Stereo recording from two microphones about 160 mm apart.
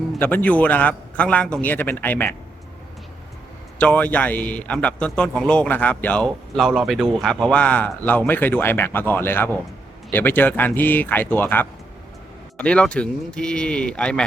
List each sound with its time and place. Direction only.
0.2 s speech: 10° left (ahead or behind)
3.8 s speech: 10° left (ahead or behind)